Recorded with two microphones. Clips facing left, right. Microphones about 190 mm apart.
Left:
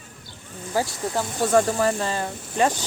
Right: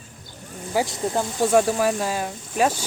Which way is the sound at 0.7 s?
20° right (ahead or behind).